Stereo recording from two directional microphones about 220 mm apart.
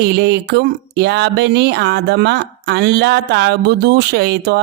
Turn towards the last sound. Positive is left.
turn(degrees=-50)  # may be behind; listen again after turning